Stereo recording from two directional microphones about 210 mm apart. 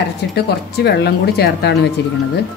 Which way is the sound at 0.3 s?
55° left (ahead or behind).